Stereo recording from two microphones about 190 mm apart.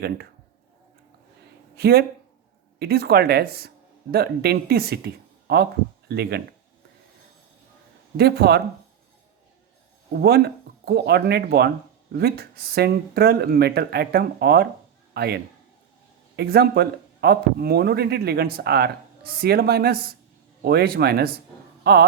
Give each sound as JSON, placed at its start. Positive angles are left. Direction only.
{"t": 1.7, "sound": "speech", "side_deg": -55}
{"t": 8.1, "sound": "speech", "side_deg": -60}
{"t": 10.1, "sound": "a man's voice", "side_deg": -55}